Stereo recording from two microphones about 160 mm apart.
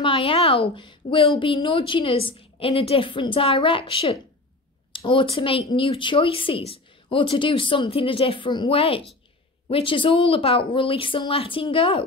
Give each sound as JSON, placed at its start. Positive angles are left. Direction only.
{"t": 0.0, "sound": "speech", "side_deg": 35}